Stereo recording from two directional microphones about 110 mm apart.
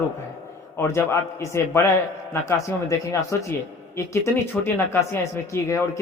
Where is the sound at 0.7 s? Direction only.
25° left (ahead or behind).